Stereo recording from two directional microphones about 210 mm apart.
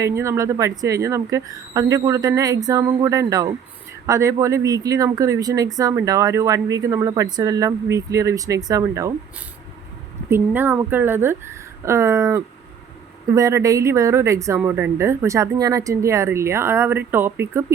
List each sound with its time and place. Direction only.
0.0 s speech: 15° right (ahead or behind)
10.2 s speech: 10° right (ahead or behind)